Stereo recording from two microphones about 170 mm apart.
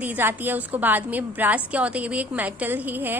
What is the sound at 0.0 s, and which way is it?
A woman's voice, 10° right (ahead or behind).